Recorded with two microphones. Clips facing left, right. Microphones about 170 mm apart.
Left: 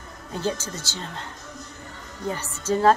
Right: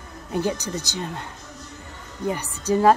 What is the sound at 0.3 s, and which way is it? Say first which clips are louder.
Speech: right 3 dB; 15° right (ahead or behind).